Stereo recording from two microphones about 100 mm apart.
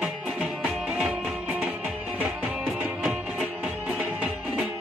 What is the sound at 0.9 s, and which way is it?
Music, 10° right (ahead or behind).